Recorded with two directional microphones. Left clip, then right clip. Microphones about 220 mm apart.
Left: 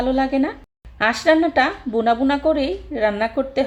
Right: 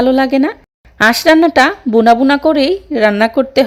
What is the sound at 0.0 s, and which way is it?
Speech, 45° right (ahead or behind).